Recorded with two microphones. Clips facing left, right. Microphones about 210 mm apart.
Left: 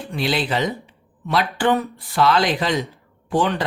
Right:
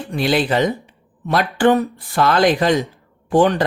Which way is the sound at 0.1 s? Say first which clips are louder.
Right 5 dB; 50° right (ahead or behind).